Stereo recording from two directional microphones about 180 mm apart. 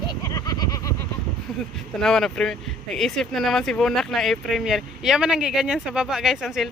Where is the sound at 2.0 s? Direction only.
5° left (ahead or behind).